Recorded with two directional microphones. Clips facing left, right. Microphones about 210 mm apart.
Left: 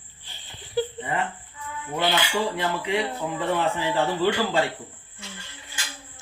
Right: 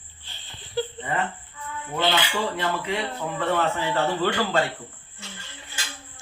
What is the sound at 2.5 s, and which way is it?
A man's voice, 15° left (ahead or behind).